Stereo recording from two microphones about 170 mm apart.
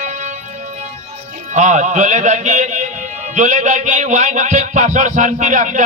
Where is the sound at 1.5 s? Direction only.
45° right (ahead or behind).